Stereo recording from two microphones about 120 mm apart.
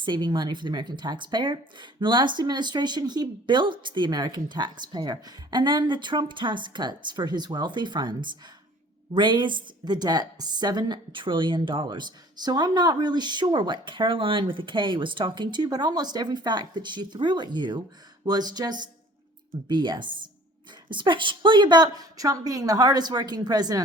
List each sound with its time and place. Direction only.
0.0 s a woman's voice: 40° right (ahead or behind)